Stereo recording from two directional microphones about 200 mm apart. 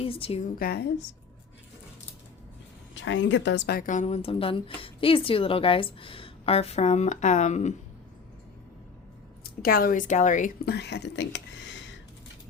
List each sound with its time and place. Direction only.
0.0 s a woman's voice: 30° left (ahead or behind); by 0.9 s 50° left (ahead or behind)
2.9 s a woman's voice: 65° left (ahead or behind); by 7.7 s 35° left (ahead or behind)
9.4 s a woman's voice: 50° left (ahead or behind)
10.7 s speech: 55° left (ahead or behind)